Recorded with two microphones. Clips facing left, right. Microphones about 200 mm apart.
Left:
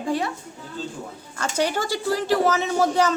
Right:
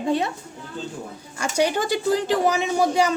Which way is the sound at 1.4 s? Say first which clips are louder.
Right 2 dB; 15° right (ahead or behind).